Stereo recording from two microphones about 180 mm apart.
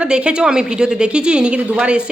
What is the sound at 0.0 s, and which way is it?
A woman's voice, 5° right (ahead or behind).